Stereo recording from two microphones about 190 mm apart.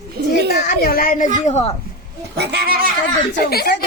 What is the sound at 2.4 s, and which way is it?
Goat, 60° right (ahead or behind).